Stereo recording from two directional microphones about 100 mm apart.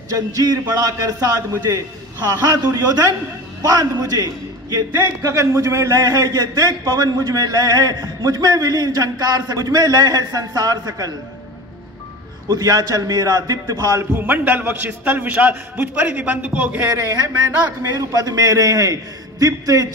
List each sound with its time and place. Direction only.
0.1 s a man's voice: 35° right (ahead or behind)
2.5 s a man's voice: 40° right (ahead or behind)
4.9 s a man's voice: 30° right (ahead or behind)
12.4 s a man's voice: 40° right (ahead or behind)
14.1 s a man's voice: 20° right (ahead or behind)
17.8 s a man's voice: 40° right (ahead or behind)